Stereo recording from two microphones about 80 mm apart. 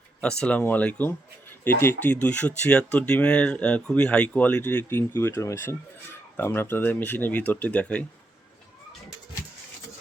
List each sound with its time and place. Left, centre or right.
0.2 s speech: centre
1.6 s speech: left
6.3 s speech: left